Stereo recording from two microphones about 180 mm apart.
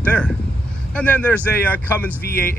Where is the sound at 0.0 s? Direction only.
10° left (ahead or behind).